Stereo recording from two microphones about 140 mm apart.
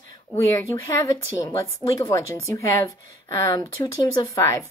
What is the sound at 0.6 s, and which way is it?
A woman's voice, 25° left (ahead or behind).